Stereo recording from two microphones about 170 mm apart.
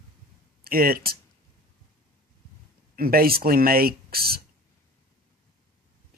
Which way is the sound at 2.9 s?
60° right (ahead or behind).